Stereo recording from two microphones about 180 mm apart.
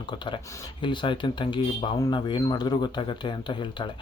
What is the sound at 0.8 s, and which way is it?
Speech, 25° left (ahead or behind).